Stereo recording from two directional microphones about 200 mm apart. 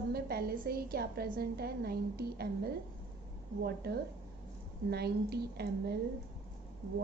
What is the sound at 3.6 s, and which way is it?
A woman's voice, 50° right (ahead or behind).